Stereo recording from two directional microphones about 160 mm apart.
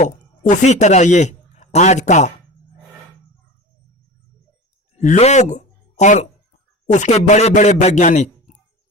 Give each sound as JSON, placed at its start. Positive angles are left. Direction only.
{"t": 0.0, "sound": "speech", "side_deg": 50}
{"t": 4.9, "sound": "speech", "side_deg": 45}